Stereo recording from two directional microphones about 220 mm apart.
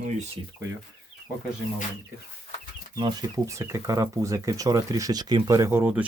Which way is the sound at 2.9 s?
20° right (ahead or behind).